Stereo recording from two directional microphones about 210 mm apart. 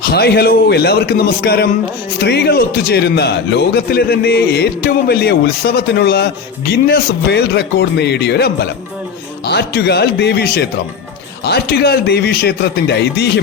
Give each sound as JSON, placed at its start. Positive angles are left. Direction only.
{"t": 0.0, "sound": "a man's voice", "side_deg": 50}